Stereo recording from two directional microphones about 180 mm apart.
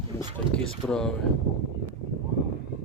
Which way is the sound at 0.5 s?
5° left (ahead or behind).